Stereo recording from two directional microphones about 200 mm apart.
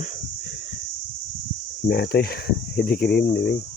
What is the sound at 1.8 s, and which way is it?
Speech, 50° left (ahead or behind).